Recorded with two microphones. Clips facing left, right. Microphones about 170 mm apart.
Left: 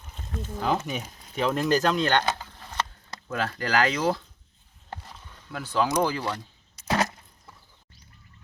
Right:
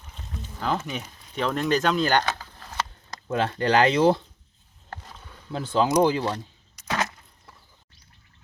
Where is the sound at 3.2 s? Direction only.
25° right (ahead or behind).